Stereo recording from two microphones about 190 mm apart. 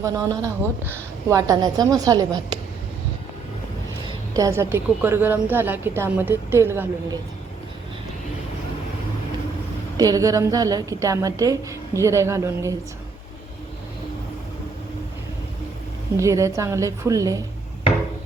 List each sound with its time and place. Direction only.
0.0 s a woman's voice: 15° right (ahead or behind)
4.4 s a woman's voice: 15° right (ahead or behind)
10.0 s a woman's voice: 20° right (ahead or behind)
16.1 s a woman's voice: 15° right (ahead or behind)